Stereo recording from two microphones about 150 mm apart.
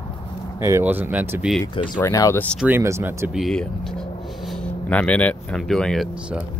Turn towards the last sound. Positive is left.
turn(degrees=5)  # may be behind; listen again after turning